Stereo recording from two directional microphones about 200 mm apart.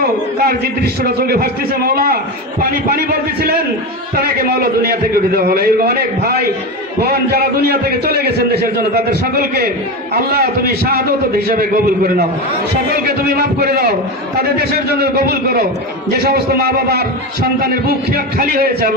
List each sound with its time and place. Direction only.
0.0 s a man's voice: 50° right (ahead or behind)